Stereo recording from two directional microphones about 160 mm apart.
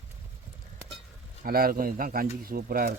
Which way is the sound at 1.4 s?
65° right (ahead or behind).